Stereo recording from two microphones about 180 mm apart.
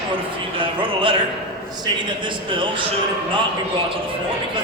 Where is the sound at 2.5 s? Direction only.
30° right (ahead or behind).